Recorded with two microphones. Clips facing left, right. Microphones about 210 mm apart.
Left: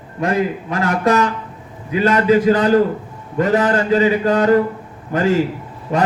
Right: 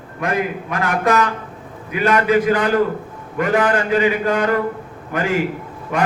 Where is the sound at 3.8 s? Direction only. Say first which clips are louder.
Left 2 dB; 40° left (ahead or behind).